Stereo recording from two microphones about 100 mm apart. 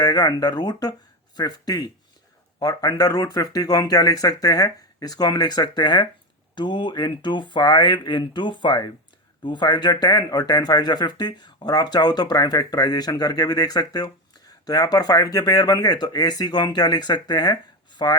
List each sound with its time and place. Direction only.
0.0 s speech: 40° left (ahead or behind)